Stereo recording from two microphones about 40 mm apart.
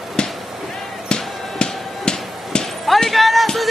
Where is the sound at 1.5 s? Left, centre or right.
Left.